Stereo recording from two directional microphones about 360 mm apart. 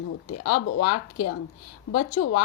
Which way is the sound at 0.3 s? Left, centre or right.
Left.